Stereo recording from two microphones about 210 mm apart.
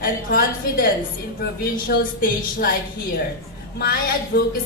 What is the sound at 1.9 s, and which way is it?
Speech, 50° left (ahead or behind).